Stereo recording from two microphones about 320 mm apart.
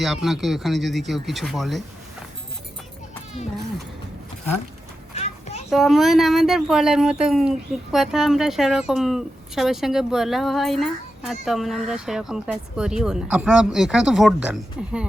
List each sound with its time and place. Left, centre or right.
0.0 s speech: centre
5.1 s children playing: centre
5.7 s speech: centre